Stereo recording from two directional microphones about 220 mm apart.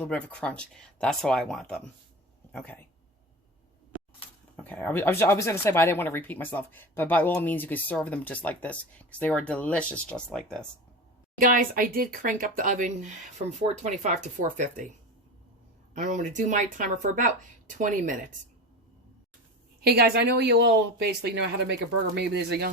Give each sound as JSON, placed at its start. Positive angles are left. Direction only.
{"t": 0.0, "sound": "speech", "side_deg": 5}
{"t": 4.6, "sound": "speech", "side_deg": 10}
{"t": 11.3, "sound": "speech", "side_deg": -40}
{"t": 16.0, "sound": "speech", "side_deg": -35}
{"t": 19.8, "sound": "speech", "side_deg": -45}